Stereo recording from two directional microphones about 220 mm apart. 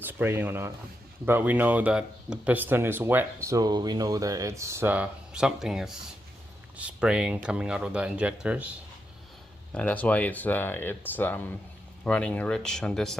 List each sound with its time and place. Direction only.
0.0 s speech: 10° right (ahead or behind)
9.7 s speech: 5° left (ahead or behind)